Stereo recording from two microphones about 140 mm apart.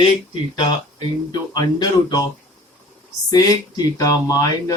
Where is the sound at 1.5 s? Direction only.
30° left (ahead or behind).